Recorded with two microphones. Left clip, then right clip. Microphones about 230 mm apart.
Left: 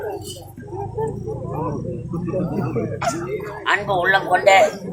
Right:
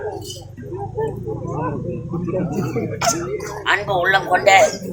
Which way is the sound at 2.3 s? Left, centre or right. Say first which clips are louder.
Right 1 dB; right.